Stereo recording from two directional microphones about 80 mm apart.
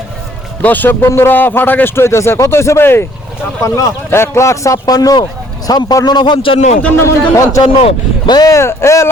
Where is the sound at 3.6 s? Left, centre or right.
Left.